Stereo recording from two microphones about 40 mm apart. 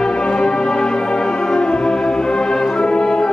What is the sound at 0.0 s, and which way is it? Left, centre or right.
Music, left.